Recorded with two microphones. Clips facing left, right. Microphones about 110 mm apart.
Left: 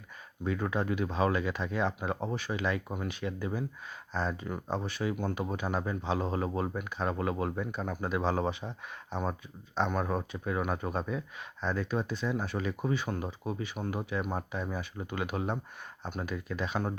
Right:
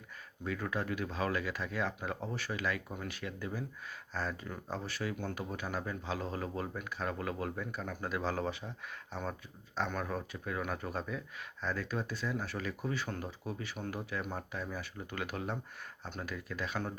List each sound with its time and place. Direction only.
0.4 s speech: 25° left (ahead or behind)